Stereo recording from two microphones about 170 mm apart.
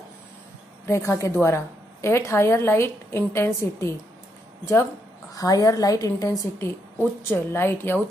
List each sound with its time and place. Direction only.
0.8 s a woman's voice: 15° left (ahead or behind)
5.3 s a woman's voice: 20° left (ahead or behind)